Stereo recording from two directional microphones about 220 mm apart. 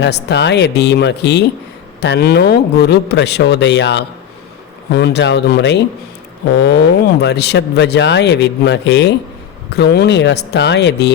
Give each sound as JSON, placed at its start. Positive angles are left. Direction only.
{"t": 0.0, "sound": "speech", "side_deg": 50}
{"t": 7.2, "sound": "speech", "side_deg": 50}